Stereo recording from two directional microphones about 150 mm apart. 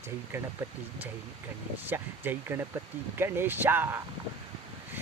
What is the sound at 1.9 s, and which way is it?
Speech, 15° right (ahead or behind).